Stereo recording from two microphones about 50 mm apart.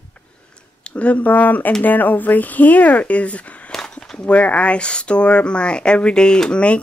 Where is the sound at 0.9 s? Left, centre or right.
Left.